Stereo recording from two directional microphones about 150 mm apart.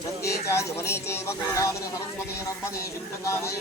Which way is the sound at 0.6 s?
20° left (ahead or behind).